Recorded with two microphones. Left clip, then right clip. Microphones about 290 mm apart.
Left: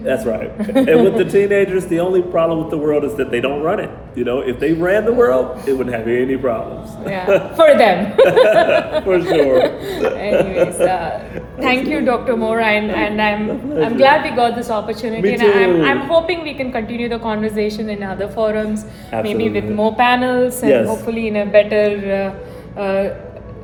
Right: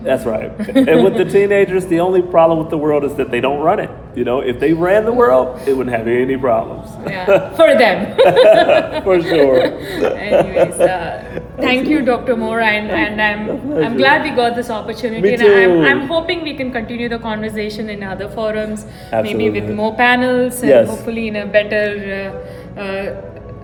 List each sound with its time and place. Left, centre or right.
0.0 s a man's voice: centre
0.6 s a woman's voice: centre
0.9 s a man's voice: centre
7.5 s a woman's voice: centre